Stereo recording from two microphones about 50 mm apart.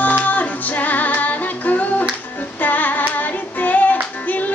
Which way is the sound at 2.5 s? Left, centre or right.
Left.